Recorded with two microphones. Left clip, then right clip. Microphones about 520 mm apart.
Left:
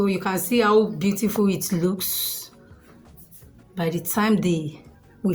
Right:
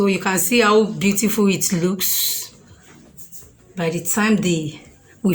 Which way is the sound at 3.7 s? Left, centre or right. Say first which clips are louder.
Right 3 dB; left.